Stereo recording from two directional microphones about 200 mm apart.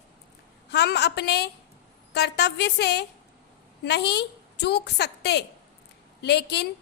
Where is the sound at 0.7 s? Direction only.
55° left (ahead or behind).